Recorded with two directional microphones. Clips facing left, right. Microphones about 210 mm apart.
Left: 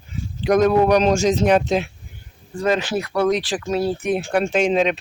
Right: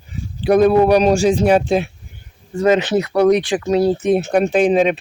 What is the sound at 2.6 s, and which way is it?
Speech, 20° right (ahead or behind).